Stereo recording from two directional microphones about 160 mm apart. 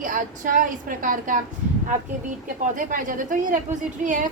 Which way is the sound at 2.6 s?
55° right (ahead or behind).